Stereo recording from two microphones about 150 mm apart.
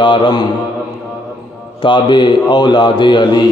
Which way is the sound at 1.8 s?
30° left (ahead or behind).